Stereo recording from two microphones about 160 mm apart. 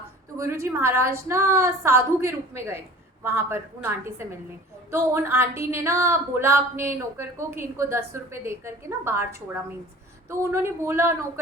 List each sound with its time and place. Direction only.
0.3 s a woman's voice: 20° right (ahead or behind)